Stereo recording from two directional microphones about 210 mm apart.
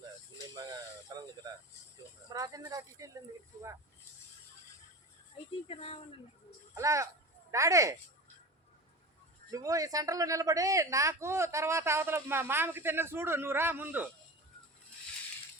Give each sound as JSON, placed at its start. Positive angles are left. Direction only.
{"t": 0.5, "sound": "snake", "side_deg": -20}
{"t": 2.3, "sound": "speech", "side_deg": -15}
{"t": 5.6, "sound": "speech", "side_deg": 25}
{"t": 6.7, "sound": "speech", "side_deg": -15}
{"t": 9.5, "sound": "speech", "side_deg": -15}